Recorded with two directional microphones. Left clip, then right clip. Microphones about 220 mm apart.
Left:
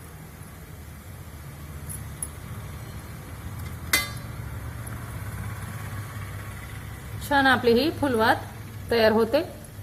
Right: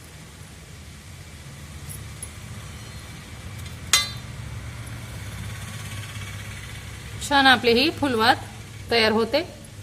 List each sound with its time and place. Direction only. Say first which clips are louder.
7.3 s a woman's voice: right 3 dB; 15° right (ahead or behind)